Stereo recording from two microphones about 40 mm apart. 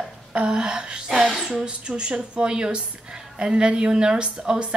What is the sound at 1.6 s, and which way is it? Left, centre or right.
A woman's voice, right.